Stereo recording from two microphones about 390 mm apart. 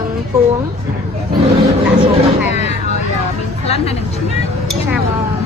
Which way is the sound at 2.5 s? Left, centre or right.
Centre.